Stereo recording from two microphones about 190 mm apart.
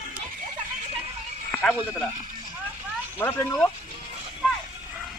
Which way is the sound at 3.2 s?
10° left (ahead or behind).